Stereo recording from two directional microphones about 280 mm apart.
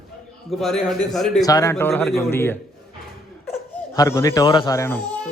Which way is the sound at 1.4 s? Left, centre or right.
Centre.